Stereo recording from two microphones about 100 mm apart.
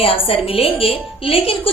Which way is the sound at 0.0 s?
70° left (ahead or behind).